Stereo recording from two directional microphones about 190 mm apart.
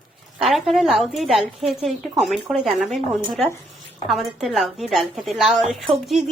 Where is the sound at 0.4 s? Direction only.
Centre (ahead or behind).